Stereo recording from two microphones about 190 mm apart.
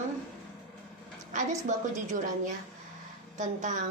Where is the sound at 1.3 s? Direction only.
40° right (ahead or behind).